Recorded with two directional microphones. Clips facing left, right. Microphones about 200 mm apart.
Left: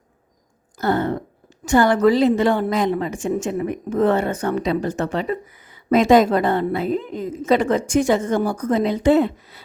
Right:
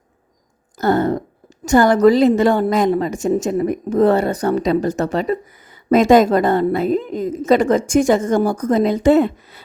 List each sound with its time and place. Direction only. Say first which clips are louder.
0.8 s a woman's voice: right 4 dB; 40° right (ahead or behind)